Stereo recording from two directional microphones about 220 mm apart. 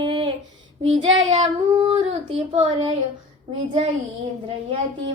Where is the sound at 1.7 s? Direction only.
20° right (ahead or behind).